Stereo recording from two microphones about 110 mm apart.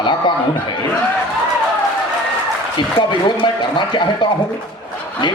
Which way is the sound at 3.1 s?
45° left (ahead or behind).